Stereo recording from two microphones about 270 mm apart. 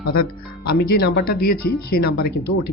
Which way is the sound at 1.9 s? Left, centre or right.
Left.